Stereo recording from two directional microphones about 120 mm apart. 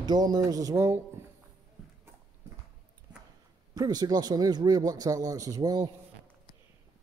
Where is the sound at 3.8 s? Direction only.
35° right (ahead or behind).